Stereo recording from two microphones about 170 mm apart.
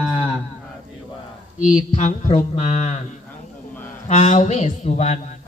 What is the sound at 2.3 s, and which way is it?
Speech, 35° left (ahead or behind).